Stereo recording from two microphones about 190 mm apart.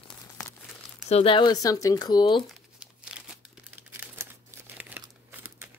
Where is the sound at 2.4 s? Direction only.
Centre (ahead or behind).